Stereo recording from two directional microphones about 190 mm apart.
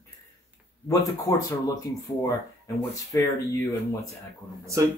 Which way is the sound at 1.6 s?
15° left (ahead or behind).